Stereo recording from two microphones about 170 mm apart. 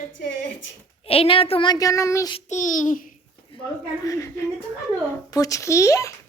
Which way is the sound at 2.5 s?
45° left (ahead or behind).